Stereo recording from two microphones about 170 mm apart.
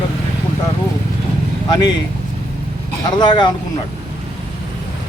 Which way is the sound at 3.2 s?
25° left (ahead or behind).